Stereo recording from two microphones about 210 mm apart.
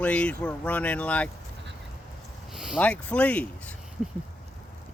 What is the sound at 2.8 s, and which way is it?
Speech, 5° left (ahead or behind).